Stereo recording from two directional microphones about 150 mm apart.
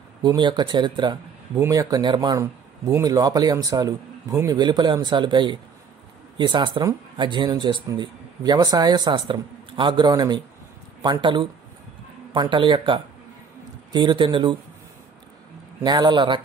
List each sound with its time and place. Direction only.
0.2 s speech: 30° right (ahead or behind)
15.8 s speech: 30° right (ahead or behind)